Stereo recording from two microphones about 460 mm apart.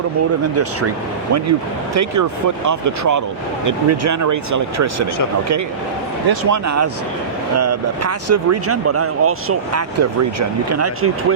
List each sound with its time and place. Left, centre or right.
0.5 s speech: right
6.4 s speech: right